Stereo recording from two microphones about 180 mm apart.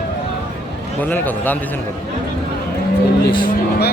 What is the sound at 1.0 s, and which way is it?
Speech, 10° left (ahead or behind).